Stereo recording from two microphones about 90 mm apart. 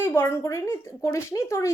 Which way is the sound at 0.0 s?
25° left (ahead or behind).